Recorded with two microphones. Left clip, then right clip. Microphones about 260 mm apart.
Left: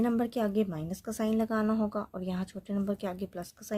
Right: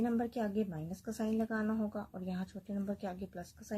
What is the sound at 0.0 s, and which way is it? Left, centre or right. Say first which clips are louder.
A woman's voice: left 6 dB; left.